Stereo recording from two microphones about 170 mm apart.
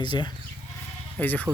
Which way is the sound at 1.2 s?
10° left (ahead or behind).